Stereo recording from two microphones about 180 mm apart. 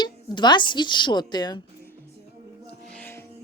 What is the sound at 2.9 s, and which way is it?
Music, 10° left (ahead or behind).